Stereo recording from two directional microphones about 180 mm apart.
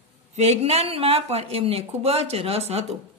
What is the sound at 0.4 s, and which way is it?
Speech, 35° right (ahead or behind).